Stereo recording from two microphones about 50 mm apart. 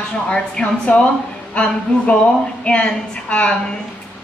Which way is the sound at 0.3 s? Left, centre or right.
Centre.